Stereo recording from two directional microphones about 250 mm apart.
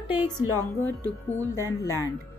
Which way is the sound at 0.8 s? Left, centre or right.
Centre.